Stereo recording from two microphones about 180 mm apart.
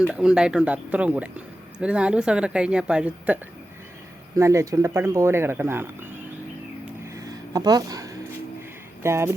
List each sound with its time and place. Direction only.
0.0 s a woman's voice: 5° right (ahead or behind)
4.4 s speech: 15° right (ahead or behind)
7.1 s a sound: 20° right (ahead or behind)
9.0 s speech: 15° right (ahead or behind)